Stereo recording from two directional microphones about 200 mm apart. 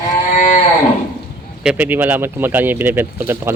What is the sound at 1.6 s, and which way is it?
Speech, 5° right (ahead or behind).